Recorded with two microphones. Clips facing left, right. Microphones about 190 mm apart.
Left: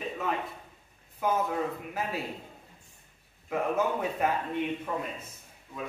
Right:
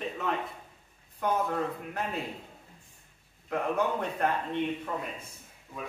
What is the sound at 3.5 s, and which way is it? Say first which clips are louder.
A man's voice: left 1 dB; 5° left (ahead or behind).